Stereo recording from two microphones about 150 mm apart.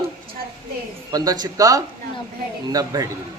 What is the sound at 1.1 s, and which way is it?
Speech, 25° right (ahead or behind).